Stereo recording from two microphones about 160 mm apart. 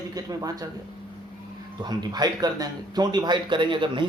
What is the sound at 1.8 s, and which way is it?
Speech, 25° right (ahead or behind).